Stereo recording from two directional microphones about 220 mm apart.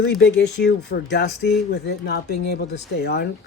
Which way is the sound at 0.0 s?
50° left (ahead or behind).